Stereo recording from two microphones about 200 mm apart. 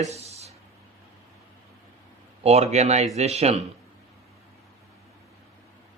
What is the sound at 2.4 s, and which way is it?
Speech, 30° right (ahead or behind).